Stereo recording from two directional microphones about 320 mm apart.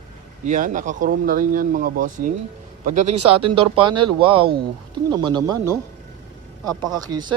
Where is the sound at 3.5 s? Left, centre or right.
Centre.